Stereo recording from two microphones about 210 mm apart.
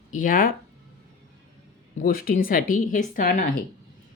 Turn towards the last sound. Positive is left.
turn(degrees=40)  # may be behind; listen again after turning